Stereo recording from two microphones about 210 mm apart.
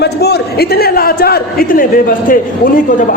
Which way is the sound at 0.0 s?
50° left (ahead or behind).